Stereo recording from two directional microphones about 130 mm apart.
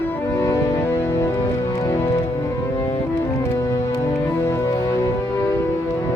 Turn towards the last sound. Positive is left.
turn(degrees=25)  # may be behind; listen again after turning